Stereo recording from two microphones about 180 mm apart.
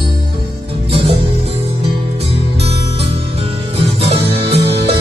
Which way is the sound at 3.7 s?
35° right (ahead or behind).